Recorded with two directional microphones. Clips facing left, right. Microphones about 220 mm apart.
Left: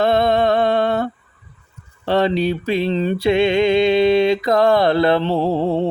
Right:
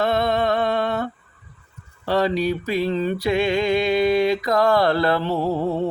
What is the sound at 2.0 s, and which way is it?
Mantra, 25° left (ahead or behind).